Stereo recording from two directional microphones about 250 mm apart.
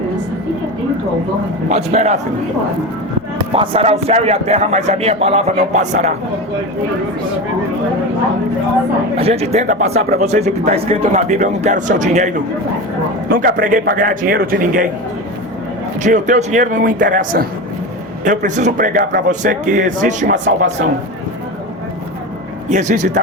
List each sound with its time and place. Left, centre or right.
1.7 s speech: right
3.5 s speech: right
9.1 s speech: right
13.3 s a man's voice: right
16.0 s a man's voice: right
22.7 s speech: right